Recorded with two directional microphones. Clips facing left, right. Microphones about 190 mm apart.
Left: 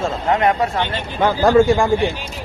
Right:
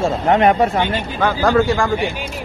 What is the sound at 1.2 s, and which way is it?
Speech, 15° left (ahead or behind).